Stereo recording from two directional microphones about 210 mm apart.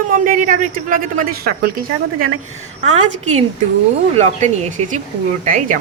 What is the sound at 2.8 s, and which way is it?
Speech, 35° right (ahead or behind).